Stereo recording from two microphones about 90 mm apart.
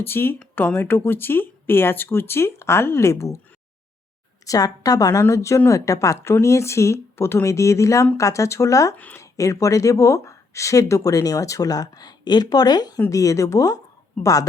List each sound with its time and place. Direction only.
0.0 s speech: 25° left (ahead or behind)
4.4 s speech: 40° left (ahead or behind)
13.1 s speech: 40° left (ahead or behind)